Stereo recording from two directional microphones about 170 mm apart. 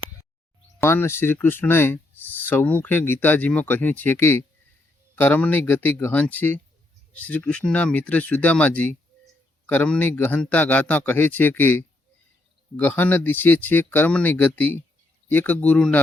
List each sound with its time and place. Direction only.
0.8 s speech: 15° left (ahead or behind)